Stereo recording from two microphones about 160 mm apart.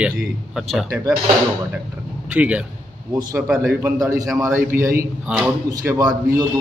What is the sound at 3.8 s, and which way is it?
A man's voice, 15° right (ahead or behind).